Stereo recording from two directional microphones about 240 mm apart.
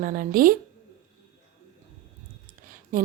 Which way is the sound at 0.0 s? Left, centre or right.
Right.